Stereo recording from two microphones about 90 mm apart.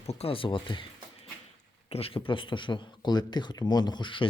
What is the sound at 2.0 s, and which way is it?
Speech, 90° left.